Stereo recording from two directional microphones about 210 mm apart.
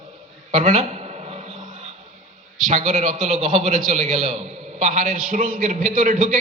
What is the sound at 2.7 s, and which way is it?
A man's voice, 35° right (ahead or behind).